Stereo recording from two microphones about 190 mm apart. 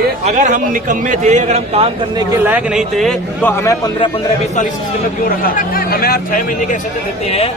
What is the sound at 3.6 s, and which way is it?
Speech, 20° left (ahead or behind).